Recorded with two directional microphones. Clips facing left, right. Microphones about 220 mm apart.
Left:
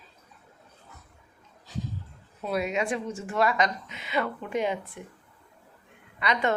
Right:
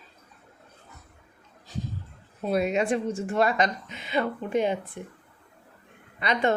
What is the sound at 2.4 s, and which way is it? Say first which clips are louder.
A woman's voice: right 4 dB; 25° right (ahead or behind).